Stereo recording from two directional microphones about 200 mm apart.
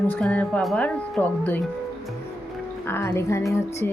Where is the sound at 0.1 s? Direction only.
5° left (ahead or behind).